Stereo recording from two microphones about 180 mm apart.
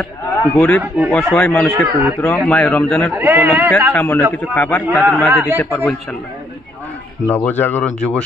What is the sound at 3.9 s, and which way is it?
Speech, 5° left (ahead or behind).